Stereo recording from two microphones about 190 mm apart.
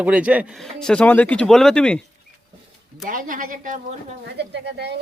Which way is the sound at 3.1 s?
45° right (ahead or behind).